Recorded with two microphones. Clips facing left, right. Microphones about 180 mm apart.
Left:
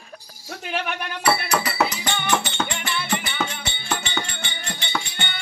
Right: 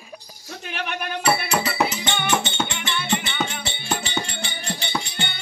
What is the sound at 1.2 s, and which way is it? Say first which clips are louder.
Music: even; 25° right (ahead or behind).